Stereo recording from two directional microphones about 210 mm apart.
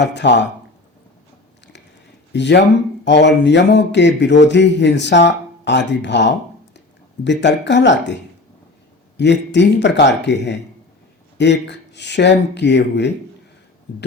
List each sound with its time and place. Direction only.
0.0 s speech: 55° left (ahead or behind)
2.3 s speech: 55° left (ahead or behind)
9.1 s speech: 55° left (ahead or behind)